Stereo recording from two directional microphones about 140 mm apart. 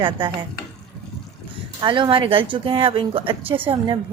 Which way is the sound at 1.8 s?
35° right (ahead or behind).